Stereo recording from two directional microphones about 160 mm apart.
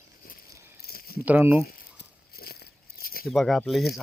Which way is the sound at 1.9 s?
70° left (ahead or behind).